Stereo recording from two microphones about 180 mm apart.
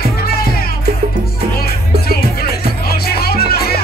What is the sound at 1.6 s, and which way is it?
Music, 60° left (ahead or behind).